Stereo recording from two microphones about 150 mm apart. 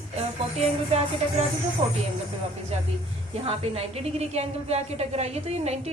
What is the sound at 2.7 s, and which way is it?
A woman's voice, 45° right (ahead or behind).